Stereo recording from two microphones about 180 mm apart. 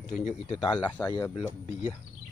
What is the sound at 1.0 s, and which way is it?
Speech, 15° left (ahead or behind).